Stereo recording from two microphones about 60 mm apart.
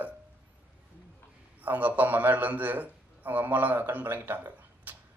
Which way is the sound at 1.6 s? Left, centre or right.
Right.